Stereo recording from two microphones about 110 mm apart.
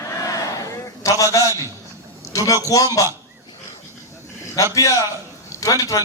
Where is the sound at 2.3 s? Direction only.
30° left (ahead or behind).